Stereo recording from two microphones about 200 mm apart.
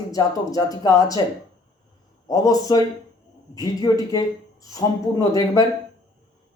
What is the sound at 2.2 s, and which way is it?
Speech, 20° left (ahead or behind).